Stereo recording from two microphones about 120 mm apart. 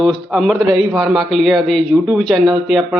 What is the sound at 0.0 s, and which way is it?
Speech, centre (ahead or behind).